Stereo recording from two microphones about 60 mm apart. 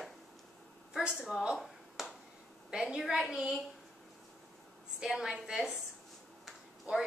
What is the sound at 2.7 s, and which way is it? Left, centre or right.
Speech, centre.